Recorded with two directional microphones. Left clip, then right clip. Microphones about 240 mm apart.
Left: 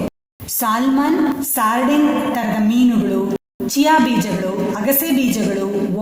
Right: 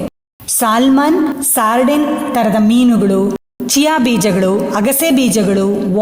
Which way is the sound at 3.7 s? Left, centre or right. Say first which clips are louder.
Right 1 dB; right.